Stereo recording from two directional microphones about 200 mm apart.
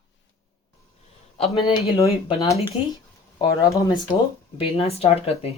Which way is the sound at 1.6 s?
30° left (ahead or behind).